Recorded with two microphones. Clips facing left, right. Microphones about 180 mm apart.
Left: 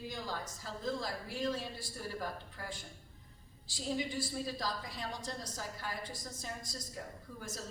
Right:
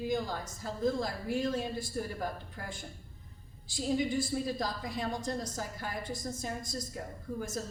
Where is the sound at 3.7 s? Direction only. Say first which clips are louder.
Right 6 dB; 50° right (ahead or behind).